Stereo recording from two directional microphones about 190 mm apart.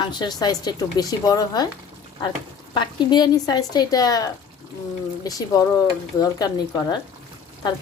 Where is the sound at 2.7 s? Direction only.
25° left (ahead or behind).